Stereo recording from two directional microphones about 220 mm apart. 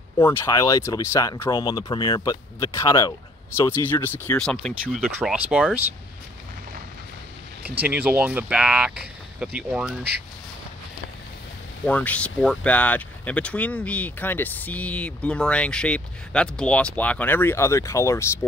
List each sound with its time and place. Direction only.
0.2 s speech: 10° left (ahead or behind); by 5.8 s 5° right (ahead or behind)
7.8 s speech: 5° right (ahead or behind)
11.8 s speech: 5° left (ahead or behind)